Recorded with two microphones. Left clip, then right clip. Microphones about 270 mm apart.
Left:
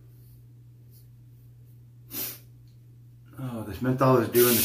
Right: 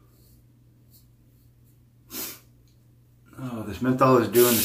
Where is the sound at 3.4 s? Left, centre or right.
Centre.